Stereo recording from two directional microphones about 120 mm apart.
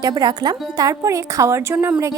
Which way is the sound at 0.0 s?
35° right (ahead or behind).